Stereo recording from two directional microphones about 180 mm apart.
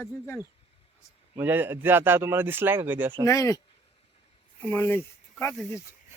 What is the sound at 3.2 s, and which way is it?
Speech, 20° left (ahead or behind).